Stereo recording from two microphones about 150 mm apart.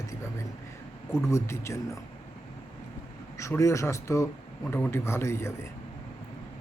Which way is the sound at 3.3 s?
20° left (ahead or behind).